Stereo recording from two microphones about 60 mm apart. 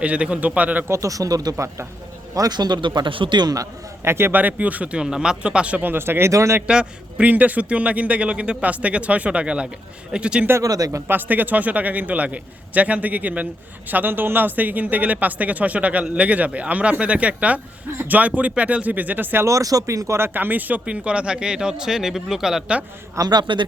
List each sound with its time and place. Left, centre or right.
0.0 s a man's voice: right
0.9 s speech: right
1.5 s speech: right
2.3 s speech: right
4.0 s speech: right
4.4 s a man's voice: right
6.3 s speech: right
6.7 s a man's voice: centre
7.3 s a man's voice: right
10.6 s speech: right
11.1 s a man's voice: right
19.5 s a man's voice: right; by 22.6 s centre
23.2 s speech: right